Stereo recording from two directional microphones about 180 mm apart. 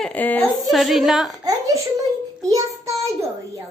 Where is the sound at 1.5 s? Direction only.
20° right (ahead or behind).